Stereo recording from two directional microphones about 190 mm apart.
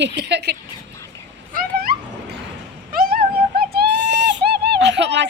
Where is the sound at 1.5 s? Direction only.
50° right (ahead or behind).